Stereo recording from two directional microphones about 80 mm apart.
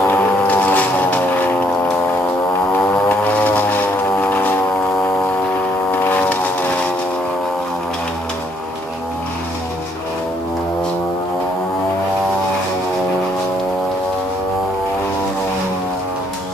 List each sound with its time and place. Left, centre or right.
0.5 s vehicle: centre
3.1 s vehicle: left
4.2 s music: left
5.9 s a sound: left